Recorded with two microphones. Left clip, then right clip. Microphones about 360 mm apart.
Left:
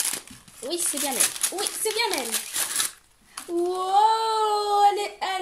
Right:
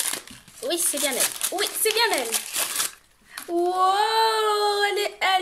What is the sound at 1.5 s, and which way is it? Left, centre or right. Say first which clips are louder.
Speech: right 5 dB; right.